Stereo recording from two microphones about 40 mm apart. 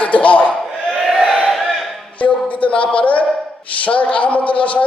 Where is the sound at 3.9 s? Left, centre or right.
Left.